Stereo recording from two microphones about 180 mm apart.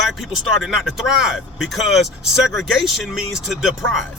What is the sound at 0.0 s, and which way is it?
Speech, centre (ahead or behind).